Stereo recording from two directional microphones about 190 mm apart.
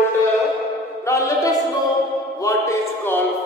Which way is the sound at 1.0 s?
15° left (ahead or behind).